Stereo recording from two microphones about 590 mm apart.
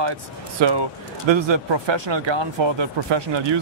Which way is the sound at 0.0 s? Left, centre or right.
Right.